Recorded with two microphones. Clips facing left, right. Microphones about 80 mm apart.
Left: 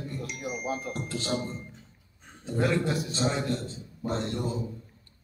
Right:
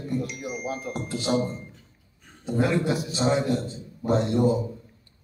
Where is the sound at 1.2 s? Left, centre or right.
Centre.